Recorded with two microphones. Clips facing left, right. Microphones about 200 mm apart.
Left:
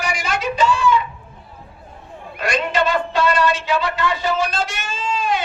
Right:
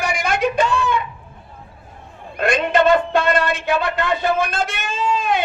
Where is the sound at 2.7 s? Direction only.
55° right (ahead or behind).